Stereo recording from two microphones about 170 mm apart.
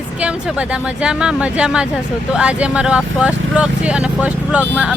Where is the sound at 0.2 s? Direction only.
5° right (ahead or behind).